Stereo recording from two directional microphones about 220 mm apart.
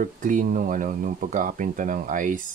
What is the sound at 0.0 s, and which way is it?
Speech, 35° right (ahead or behind).